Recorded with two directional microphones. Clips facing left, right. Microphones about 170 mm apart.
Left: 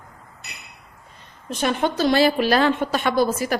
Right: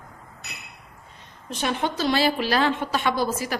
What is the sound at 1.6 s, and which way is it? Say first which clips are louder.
A woman's voice: left 4 dB; 50° left (ahead or behind).